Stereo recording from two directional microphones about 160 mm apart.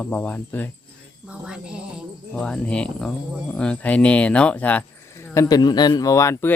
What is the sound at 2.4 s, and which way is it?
Speech, 5° left (ahead or behind).